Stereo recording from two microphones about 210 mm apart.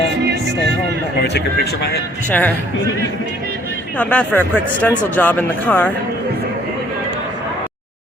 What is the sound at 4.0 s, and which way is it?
Speech, 5° left (ahead or behind).